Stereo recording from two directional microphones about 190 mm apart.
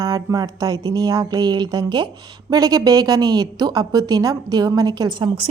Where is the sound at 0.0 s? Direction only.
20° right (ahead or behind).